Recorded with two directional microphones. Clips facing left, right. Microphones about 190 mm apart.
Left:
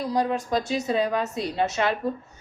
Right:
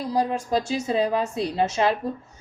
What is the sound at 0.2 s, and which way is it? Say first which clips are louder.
A woman's voice: right 2 dB; 30° right (ahead or behind).